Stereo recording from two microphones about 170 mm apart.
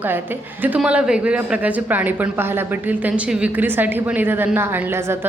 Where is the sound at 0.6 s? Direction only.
10° right (ahead or behind).